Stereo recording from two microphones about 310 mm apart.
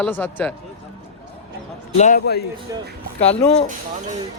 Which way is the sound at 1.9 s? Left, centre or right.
Left.